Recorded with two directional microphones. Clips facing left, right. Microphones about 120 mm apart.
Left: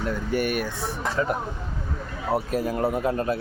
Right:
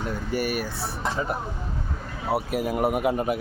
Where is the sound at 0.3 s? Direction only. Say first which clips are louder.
Left 1 dB; 5° right (ahead or behind).